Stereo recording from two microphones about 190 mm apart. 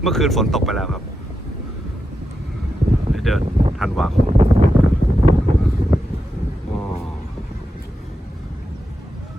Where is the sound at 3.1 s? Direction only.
Centre (ahead or behind).